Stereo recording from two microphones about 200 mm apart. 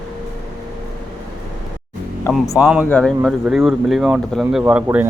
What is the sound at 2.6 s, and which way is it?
Speech, 5° right (ahead or behind).